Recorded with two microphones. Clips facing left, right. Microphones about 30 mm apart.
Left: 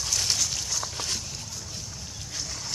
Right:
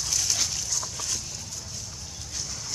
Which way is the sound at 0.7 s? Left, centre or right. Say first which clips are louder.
Left 1 dB; left.